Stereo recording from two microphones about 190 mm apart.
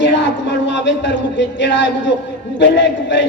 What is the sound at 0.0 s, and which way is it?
A man's voice, 65° left (ahead or behind).